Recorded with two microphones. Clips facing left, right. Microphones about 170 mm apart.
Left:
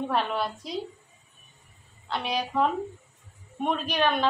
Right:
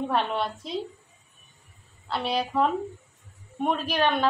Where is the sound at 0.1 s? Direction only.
Centre (ahead or behind).